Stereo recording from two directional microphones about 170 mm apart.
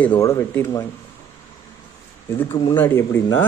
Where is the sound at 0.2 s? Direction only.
15° left (ahead or behind).